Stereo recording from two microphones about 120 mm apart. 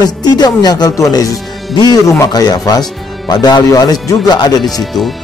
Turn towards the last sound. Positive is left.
turn(degrees=0)  # may be behind; listen again after turning